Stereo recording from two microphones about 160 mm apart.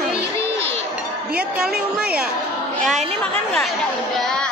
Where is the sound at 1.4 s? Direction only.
5° right (ahead or behind).